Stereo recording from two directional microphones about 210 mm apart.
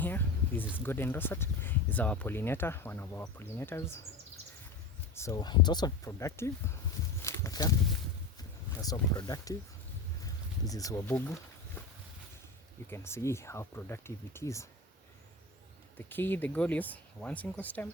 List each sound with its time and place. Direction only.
0.0 s speech: 10° left (ahead or behind)
5.1 s speech: 15° left (ahead or behind)
7.2 s a sound: 15° left (ahead or behind)
8.4 s speech: 20° left (ahead or behind)
10.6 s speech: 15° left (ahead or behind)
12.9 s speech: 10° left (ahead or behind)
16.0 s speech: 10° left (ahead or behind)